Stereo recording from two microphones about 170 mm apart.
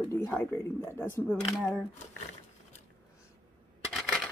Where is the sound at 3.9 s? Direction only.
Centre (ahead or behind).